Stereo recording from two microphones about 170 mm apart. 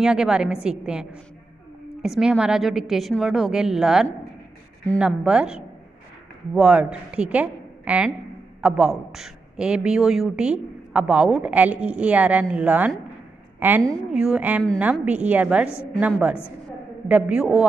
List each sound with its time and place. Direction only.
0.0 s a woman's voice: 5° right (ahead or behind)